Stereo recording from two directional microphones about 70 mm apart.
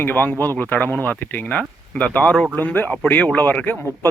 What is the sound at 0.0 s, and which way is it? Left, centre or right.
Speech, left.